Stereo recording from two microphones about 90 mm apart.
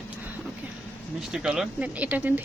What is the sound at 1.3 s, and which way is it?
Speech, 5° right (ahead or behind).